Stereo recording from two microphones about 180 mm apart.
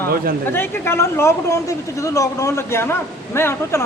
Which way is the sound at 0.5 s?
15° left (ahead or behind).